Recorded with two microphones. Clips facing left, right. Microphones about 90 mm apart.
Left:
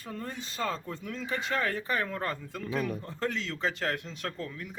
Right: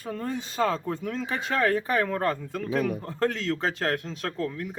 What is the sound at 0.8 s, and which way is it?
Speech, 70° right (ahead or behind).